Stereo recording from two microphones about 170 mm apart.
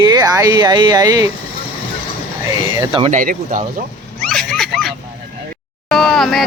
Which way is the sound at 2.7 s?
30° right (ahead or behind).